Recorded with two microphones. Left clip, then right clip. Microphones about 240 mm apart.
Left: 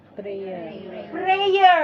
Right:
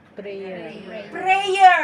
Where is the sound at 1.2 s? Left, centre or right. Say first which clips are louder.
Right 1 dB; right.